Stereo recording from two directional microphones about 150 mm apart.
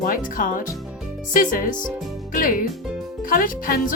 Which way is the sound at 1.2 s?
65° left (ahead or behind).